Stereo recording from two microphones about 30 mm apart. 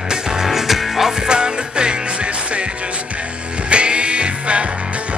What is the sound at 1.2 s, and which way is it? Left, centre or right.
Music, right.